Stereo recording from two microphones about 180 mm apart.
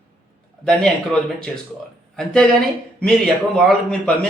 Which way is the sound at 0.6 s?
5° left (ahead or behind).